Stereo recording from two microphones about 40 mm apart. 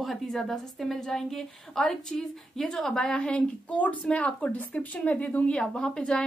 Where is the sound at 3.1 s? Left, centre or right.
Left.